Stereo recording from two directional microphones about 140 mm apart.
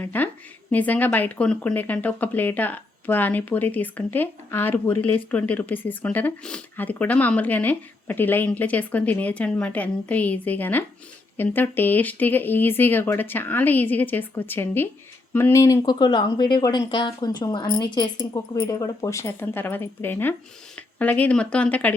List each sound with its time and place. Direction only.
0.0 s speech: 10° left (ahead or behind)